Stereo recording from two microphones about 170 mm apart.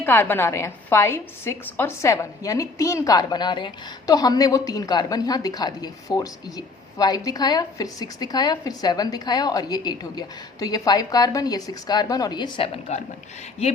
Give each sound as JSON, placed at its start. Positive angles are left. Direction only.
{"t": 0.0, "sound": "a woman's voice", "side_deg": 10}